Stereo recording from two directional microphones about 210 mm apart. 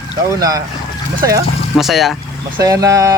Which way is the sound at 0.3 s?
15° right (ahead or behind).